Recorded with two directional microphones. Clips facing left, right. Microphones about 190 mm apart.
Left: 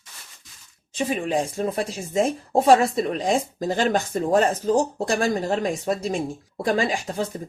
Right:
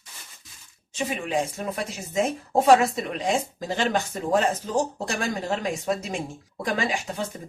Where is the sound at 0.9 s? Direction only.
35° left (ahead or behind).